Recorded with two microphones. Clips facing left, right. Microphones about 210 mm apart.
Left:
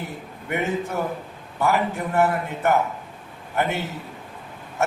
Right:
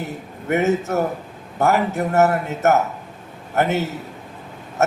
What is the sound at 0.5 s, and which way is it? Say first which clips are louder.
A man's voice: right 6 dB; 45° right (ahead or behind).